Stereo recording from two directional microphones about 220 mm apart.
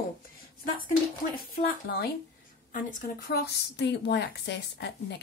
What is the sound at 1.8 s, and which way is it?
Speech, 45° left (ahead or behind).